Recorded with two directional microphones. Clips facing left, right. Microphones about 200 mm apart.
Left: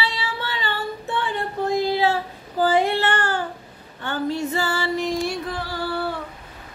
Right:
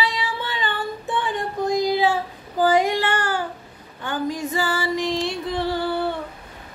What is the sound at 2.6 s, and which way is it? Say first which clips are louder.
Child singing: right 1 dB; 15° right (ahead or behind).